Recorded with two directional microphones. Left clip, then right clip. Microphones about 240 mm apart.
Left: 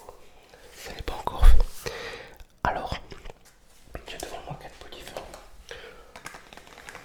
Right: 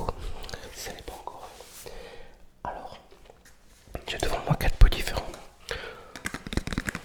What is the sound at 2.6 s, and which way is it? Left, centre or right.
Whispering, left.